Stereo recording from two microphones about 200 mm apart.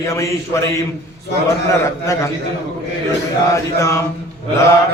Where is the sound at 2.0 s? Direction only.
15° left (ahead or behind).